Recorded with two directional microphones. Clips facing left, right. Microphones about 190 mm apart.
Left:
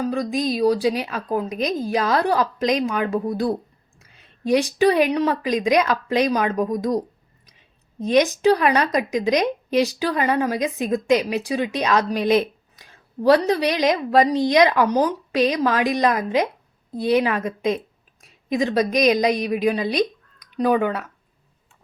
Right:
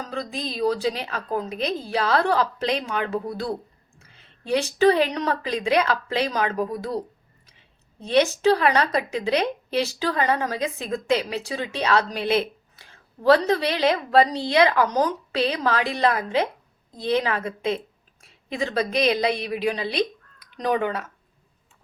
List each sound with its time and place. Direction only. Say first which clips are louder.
0.0 s a woman's voice: left 8 dB; 15° left (ahead or behind)